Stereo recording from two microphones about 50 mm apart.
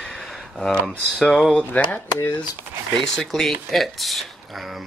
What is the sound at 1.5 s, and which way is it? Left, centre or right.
Speech, centre.